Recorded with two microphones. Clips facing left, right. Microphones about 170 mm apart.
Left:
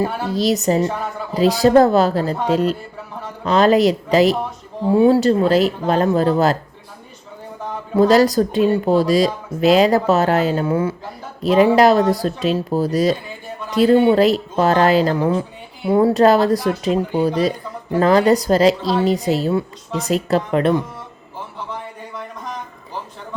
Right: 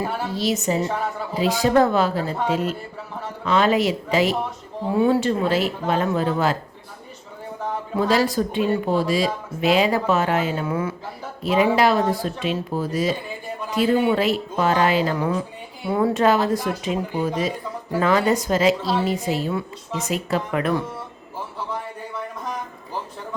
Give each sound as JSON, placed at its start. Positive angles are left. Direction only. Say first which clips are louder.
{"t": 0.3, "sound": "speech", "louder": "left 6 dB", "side_deg": 40}
{"t": 7.9, "sound": "speech", "louder": "left 7 dB", "side_deg": 40}
{"t": 18.8, "sound": "a woman's voice", "louder": "left 4 dB", "side_deg": -10}
{"t": 19.0, "sound": "speech", "louder": "left 6 dB", "side_deg": 35}